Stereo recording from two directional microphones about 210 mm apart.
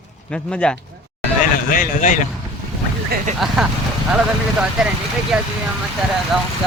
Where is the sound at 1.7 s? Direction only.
40° left (ahead or behind).